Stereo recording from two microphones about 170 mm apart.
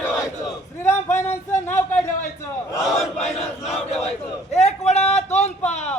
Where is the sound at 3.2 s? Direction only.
40° left (ahead or behind).